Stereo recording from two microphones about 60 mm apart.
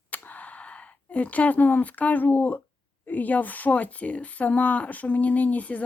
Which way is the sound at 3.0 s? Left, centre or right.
Left.